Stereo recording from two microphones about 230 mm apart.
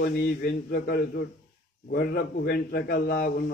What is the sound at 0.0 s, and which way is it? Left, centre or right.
A man's voice, left.